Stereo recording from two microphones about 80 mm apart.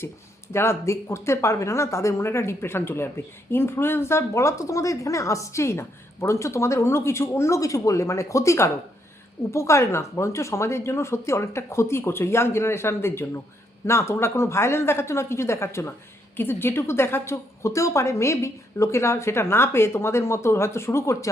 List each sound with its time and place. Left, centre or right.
0.0 s a woman's voice: left